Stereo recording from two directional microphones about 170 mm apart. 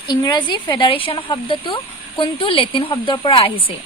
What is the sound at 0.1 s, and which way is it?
A woman's voice, 25° left (ahead or behind).